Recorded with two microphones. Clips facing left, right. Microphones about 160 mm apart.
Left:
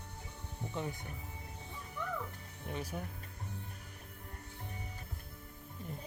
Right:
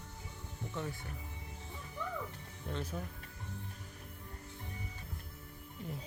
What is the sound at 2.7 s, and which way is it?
Speech, 15° left (ahead or behind).